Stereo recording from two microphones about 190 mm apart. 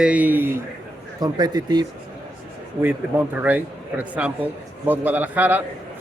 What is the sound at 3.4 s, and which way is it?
Speech, 10° right (ahead or behind).